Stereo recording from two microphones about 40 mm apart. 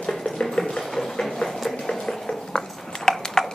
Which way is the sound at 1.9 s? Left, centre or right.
Centre.